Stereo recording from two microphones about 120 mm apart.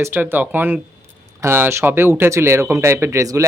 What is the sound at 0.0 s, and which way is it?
Speech, 15° right (ahead or behind).